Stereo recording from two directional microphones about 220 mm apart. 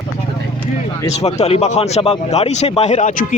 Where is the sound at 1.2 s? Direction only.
30° left (ahead or behind).